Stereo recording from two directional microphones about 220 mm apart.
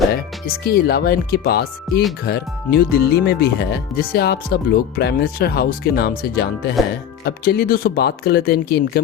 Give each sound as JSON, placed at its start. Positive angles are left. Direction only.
{"t": 0.1, "sound": "speech", "side_deg": 45}